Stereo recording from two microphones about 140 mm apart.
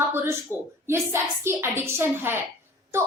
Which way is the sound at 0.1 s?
15° right (ahead or behind).